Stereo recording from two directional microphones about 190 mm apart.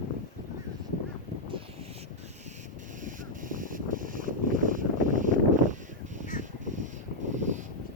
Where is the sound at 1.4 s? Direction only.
30° right (ahead or behind).